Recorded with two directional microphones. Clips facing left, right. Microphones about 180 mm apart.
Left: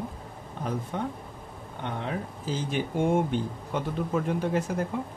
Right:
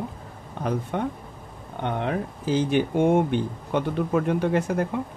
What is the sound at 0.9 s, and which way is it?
Speech, 65° right (ahead or behind).